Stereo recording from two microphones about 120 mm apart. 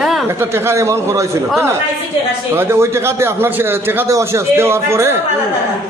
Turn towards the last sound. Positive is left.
turn(degrees=-20)  # may be behind; listen again after turning